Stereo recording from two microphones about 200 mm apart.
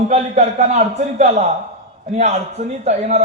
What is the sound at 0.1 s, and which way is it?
Speech, 35° right (ahead or behind).